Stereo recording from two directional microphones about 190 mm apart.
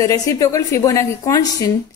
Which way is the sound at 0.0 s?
20° left (ahead or behind).